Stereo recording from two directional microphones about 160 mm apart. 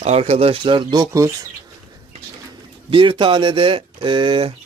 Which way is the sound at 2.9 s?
35° right (ahead or behind).